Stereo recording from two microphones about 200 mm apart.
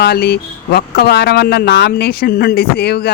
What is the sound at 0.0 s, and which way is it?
Speech, 50° left (ahead or behind).